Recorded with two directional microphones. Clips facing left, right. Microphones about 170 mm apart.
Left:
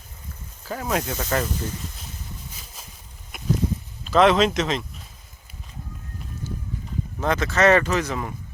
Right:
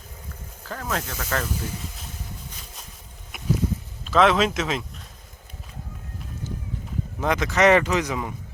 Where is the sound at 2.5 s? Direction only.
Centre (ahead or behind).